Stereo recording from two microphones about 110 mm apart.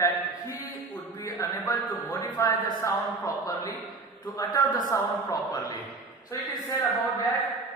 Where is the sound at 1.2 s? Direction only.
30° left (ahead or behind).